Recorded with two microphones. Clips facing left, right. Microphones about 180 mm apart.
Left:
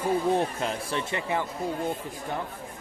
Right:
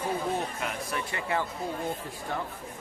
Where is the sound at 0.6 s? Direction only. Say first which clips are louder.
Left 3 dB; 30° left (ahead or behind).